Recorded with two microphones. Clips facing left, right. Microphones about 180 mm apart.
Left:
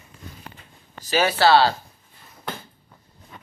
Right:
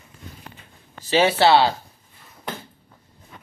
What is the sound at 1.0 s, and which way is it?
Speech, 25° right (ahead or behind).